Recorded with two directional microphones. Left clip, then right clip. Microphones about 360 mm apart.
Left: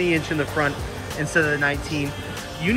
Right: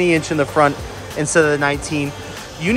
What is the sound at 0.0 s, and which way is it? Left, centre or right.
Speech, centre.